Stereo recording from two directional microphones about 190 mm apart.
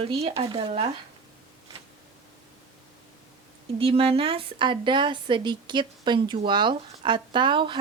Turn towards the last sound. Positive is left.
turn(degrees=-25)  # may be behind; listen again after turning